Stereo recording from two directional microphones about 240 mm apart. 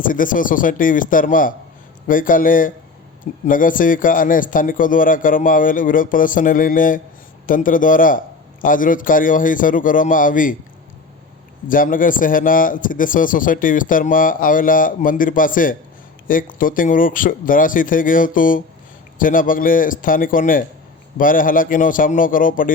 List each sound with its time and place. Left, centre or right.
0.0 s a man's voice: left
11.7 s a man's voice: left